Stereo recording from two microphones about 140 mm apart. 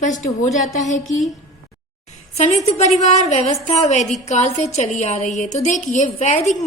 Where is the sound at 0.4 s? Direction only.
60° left (ahead or behind).